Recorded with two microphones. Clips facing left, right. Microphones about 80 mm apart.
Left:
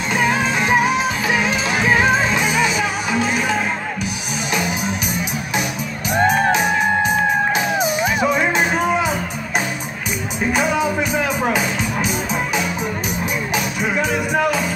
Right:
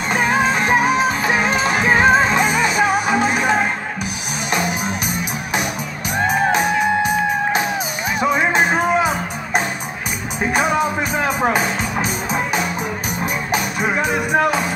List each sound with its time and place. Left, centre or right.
0.3 s music: right
7.5 s music: centre
13.2 s music: right
14.0 s music: centre